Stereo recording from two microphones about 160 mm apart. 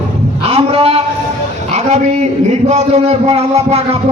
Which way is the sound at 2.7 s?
40° right (ahead or behind).